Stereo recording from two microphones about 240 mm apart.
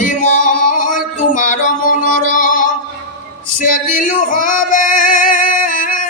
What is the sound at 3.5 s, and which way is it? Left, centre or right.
Male singing, left.